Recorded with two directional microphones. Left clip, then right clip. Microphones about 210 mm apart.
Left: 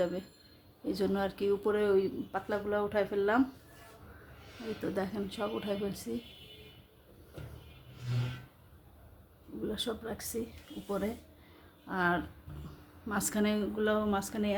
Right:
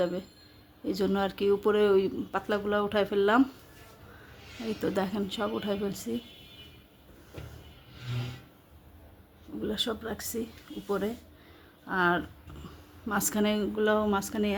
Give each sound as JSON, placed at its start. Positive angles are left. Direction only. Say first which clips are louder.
{"t": 0.0, "sound": "a woman's voice", "louder": "right 3 dB", "side_deg": -10}
{"t": 4.8, "sound": "a woman's voice", "louder": "right 5 dB", "side_deg": -25}
{"t": 9.6, "sound": "a woman's voice", "louder": "right 5 dB", "side_deg": -15}